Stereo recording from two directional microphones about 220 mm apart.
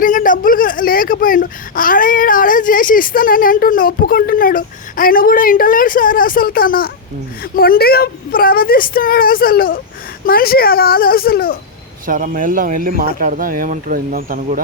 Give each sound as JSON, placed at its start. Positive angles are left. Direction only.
{"t": 0.0, "sound": "speech", "side_deg": 35}
{"t": 12.0, "sound": "speech", "side_deg": -35}